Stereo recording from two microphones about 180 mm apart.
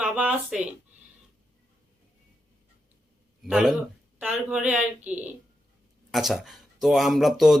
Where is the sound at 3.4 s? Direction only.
5° right (ahead or behind).